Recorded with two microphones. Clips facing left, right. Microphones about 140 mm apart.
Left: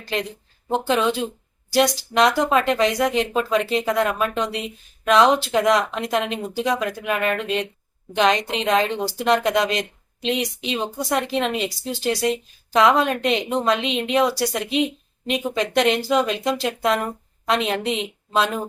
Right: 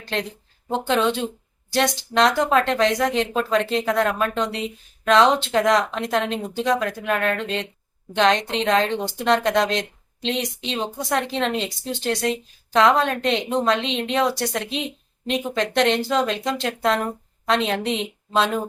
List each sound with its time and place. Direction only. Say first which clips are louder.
0.0 s a woman's voice: left 1 dB; 5° left (ahead or behind)